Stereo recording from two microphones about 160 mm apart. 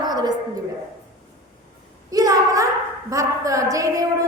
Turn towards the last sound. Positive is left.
turn(degrees=-20)  # may be behind; listen again after turning